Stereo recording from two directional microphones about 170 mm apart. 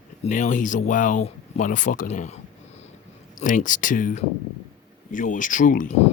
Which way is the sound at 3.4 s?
50° left (ahead or behind).